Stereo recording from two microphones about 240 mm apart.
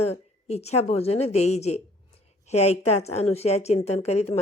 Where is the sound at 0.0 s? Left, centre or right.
Left.